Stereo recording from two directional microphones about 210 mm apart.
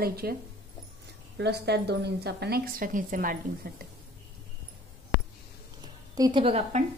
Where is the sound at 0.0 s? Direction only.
45° right (ahead or behind).